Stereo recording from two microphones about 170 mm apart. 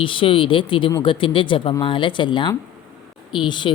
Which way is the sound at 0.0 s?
30° left (ahead or behind).